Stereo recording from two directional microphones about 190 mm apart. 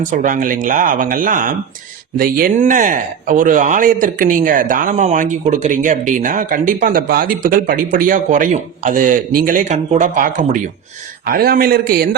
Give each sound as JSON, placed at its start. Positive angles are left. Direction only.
{"t": 0.0, "sound": "speech", "side_deg": -45}